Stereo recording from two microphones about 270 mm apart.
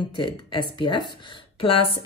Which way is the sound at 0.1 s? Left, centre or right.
Centre.